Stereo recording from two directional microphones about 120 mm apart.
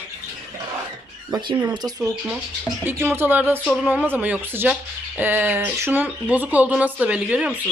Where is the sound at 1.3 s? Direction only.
40° right (ahead or behind).